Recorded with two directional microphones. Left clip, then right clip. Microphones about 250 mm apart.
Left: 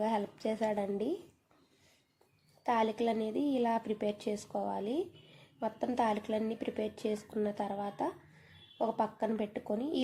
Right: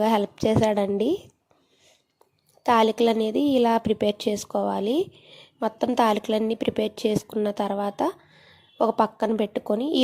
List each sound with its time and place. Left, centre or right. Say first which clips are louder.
0.0 s a woman's voice: right 12 dB; right
2.6 s a woman's voice: right 12 dB; right